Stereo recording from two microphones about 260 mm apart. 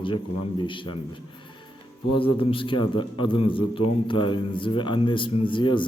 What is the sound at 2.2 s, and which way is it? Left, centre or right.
Speech, left.